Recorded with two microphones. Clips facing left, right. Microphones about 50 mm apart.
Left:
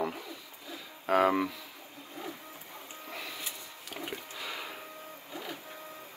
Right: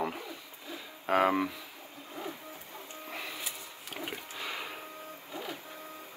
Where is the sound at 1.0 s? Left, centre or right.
Centre.